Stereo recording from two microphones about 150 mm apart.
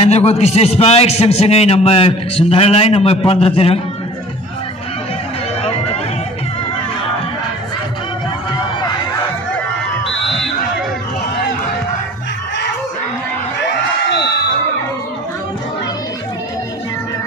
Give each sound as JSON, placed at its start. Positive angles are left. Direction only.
{"t": 0.0, "sound": "a man's voice", "side_deg": 45}
{"t": 5.6, "sound": "run", "side_deg": 40}
{"t": 8.5, "sound": "a sound", "side_deg": 30}